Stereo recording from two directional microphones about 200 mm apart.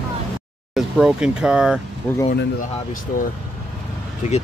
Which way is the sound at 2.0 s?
5° left (ahead or behind).